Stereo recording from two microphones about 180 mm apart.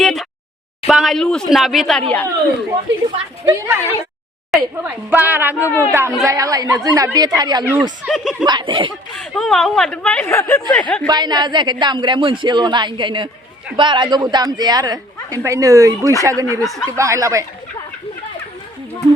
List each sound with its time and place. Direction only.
0.0 s a sound: centre (ahead or behind)
0.9 s speech: centre (ahead or behind)
3.4 s a woman's voice: 15° right (ahead or behind)
7.6 s speech: 10° right (ahead or behind)
8.0 s speech: centre (ahead or behind)
8.4 s a woman's voice: 25° right (ahead or behind)
9.1 s speech: centre (ahead or behind)
11.0 s a woman's voice: 25° right (ahead or behind)
16.6 s speech: 5° left (ahead or behind)
17.0 s speech: 20° right (ahead or behind)